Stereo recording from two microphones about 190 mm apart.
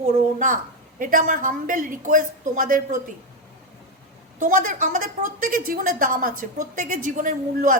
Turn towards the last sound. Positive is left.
turn(degrees=-45)  # may be behind; listen again after turning